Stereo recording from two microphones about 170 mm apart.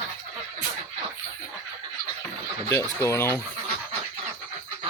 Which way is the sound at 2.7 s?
15° left (ahead or behind).